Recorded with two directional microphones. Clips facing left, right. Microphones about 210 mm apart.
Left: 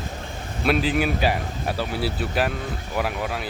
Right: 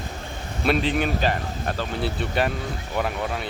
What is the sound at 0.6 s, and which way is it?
A man's voice, centre (ahead or behind).